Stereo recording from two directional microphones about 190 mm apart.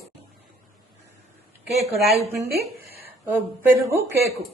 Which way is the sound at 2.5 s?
55° right (ahead or behind).